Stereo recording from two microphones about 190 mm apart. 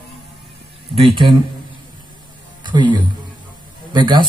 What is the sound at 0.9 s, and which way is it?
Speech, 25° right (ahead or behind).